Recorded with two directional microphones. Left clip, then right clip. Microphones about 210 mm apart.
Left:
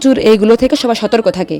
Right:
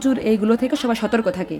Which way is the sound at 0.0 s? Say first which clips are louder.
Left 11 dB; 35° left (ahead or behind).